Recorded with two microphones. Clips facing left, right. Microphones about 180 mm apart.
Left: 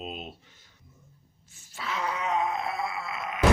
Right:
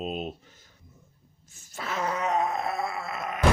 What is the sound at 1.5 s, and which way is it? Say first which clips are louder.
Groan: right 1 dB; 45° right (ahead or behind).